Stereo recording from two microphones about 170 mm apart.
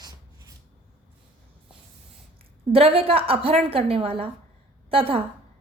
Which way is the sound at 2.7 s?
35° right (ahead or behind).